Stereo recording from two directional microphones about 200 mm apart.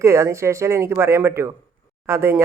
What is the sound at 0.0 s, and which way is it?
Speech, 15° right (ahead or behind).